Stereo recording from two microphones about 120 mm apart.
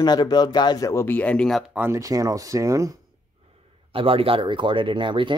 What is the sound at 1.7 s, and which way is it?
Speech, 20° right (ahead or behind).